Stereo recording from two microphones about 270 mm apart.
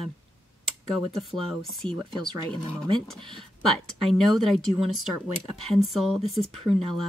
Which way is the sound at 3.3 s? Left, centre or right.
Centre.